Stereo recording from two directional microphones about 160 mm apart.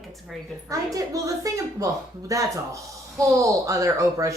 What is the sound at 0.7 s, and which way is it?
Speech, 20° right (ahead or behind).